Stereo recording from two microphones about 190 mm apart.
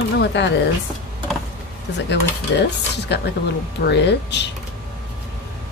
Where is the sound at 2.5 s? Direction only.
70° left (ahead or behind).